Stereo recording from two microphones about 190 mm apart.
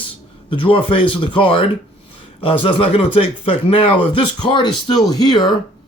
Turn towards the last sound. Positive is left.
turn(degrees=20)  # may be behind; listen again after turning